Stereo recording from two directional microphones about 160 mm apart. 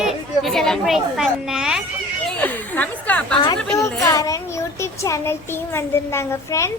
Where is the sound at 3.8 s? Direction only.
20° left (ahead or behind).